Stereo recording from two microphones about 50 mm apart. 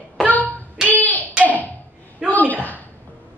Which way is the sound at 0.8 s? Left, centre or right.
Left.